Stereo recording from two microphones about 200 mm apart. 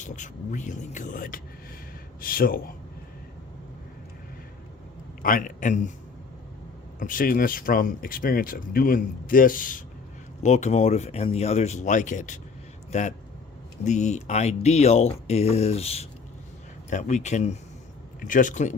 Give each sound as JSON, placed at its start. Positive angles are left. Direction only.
{"t": 0.0, "sound": "speech", "side_deg": 40}
{"t": 5.2, "sound": "speech", "side_deg": 45}
{"t": 7.0, "sound": "speech", "side_deg": 45}